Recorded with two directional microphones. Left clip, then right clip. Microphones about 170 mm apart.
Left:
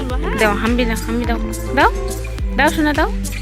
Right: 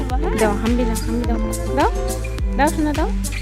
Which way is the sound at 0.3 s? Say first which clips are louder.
Left 3 dB; 15° right (ahead or behind).